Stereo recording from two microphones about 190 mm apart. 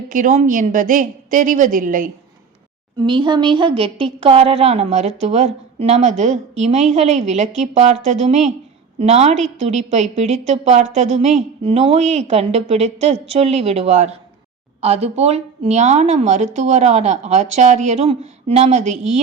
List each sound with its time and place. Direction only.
0.1 s a woman's voice: 40° right (ahead or behind)
3.0 s a woman's voice: 25° right (ahead or behind)